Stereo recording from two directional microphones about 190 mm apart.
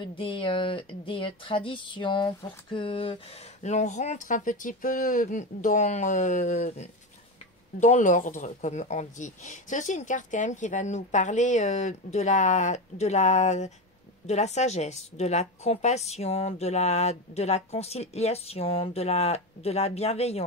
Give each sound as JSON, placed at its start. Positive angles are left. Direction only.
{"t": 0.0, "sound": "speech", "side_deg": 25}